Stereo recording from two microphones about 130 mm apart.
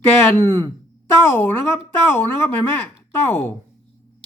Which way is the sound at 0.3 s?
15° left (ahead or behind).